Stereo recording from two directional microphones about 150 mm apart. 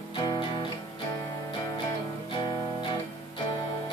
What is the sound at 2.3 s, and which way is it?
Music, 35° left (ahead or behind).